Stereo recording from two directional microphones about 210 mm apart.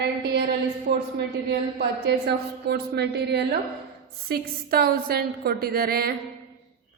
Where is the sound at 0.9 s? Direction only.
50° right (ahead or behind).